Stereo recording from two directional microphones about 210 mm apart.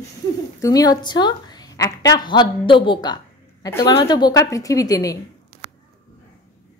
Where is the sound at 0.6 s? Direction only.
15° left (ahead or behind).